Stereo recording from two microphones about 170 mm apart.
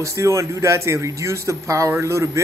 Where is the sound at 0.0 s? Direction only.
20° right (ahead or behind).